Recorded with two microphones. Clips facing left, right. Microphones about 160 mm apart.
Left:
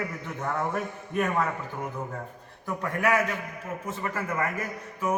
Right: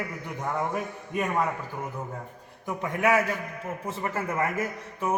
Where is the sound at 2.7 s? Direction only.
20° right (ahead or behind).